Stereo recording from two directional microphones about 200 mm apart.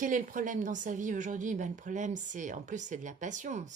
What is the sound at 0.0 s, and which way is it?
A woman's voice, 40° right (ahead or behind).